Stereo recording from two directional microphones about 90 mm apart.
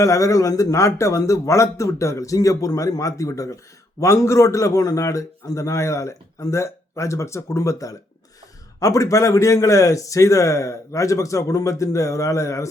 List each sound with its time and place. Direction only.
0.0 s a man's voice: 35° left (ahead or behind)